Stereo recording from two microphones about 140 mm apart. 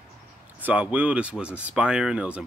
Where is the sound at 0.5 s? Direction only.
10° right (ahead or behind).